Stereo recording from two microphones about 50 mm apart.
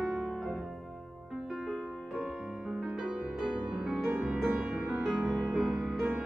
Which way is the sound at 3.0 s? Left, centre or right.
Centre.